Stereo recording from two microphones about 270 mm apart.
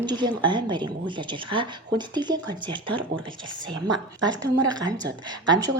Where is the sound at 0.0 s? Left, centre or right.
Centre.